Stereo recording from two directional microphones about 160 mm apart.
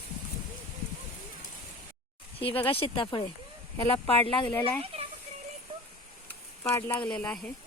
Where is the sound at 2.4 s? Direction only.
35° left (ahead or behind).